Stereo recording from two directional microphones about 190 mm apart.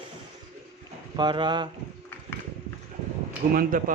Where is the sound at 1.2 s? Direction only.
25° right (ahead or behind).